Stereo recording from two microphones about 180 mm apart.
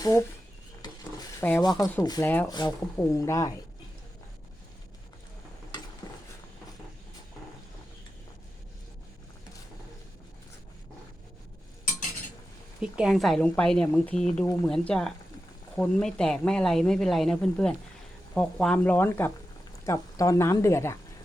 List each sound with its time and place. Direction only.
0.0 s speech: 15° left (ahead or behind)
1.4 s speech: 15° left (ahead or behind)
6.0 s mechanisms: 20° left (ahead or behind)
12.8 s speech: 5° right (ahead or behind); by 21.0 s 15° left (ahead or behind)